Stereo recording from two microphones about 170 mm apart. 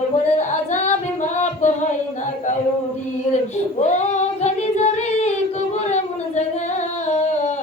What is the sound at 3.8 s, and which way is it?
Child singing, 45° left (ahead or behind).